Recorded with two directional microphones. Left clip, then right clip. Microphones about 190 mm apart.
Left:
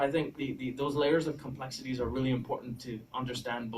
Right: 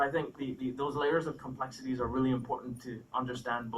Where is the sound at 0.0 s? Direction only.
45° left (ahead or behind).